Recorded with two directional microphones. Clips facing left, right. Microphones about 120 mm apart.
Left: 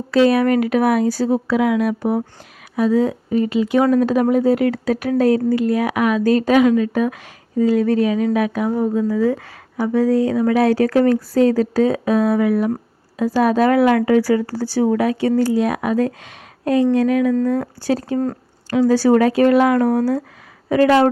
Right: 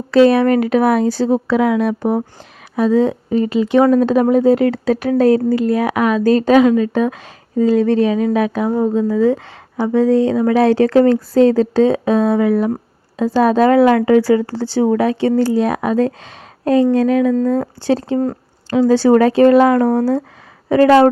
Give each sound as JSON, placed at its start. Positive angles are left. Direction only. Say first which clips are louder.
{"t": 0.1, "sound": "speech", "louder": "right 4 dB", "side_deg": -30}
{"t": 2.0, "sound": "speech", "louder": "right 2 dB", "side_deg": -45}
{"t": 2.7, "sound": "a woman's voice", "louder": "right 3 dB", "side_deg": -30}
{"t": 20.7, "sound": "speech", "louder": "right 4 dB", "side_deg": -35}